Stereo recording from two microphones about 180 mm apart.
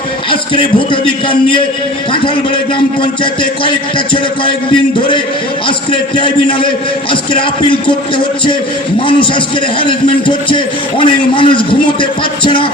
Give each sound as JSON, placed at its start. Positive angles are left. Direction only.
{"t": 0.3, "sound": "a man's voice", "side_deg": 30}
{"t": 3.6, "sound": "a man's voice", "side_deg": 30}